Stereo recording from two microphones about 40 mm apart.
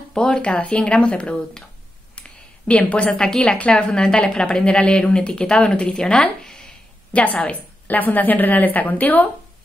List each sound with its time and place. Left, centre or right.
0.1 s speech: centre
2.7 s a woman's voice: left
3.1 s speech: centre
3.8 s speech: centre
4.5 s speech: left
6.4 s a sound: centre
7.1 s a woman's voice: left
7.9 s speech: left